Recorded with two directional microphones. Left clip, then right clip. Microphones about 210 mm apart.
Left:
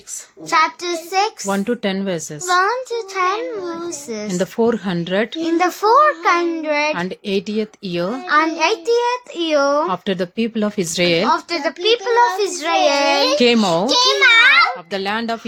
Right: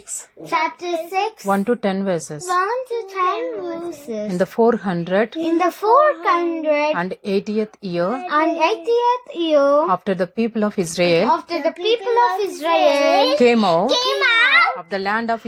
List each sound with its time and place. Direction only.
0.5 s a child's voice: centre (ahead or behind)
5.4 s a child's voice: 5° right (ahead or behind)
6.9 s speech: 25° left (ahead or behind)
8.0 s a child's voice: centre (ahead or behind)
10.1 s speech: 25° left (ahead or behind)
11.3 s a child's voice: centre (ahead or behind)
13.2 s a child's voice: 25° left (ahead or behind)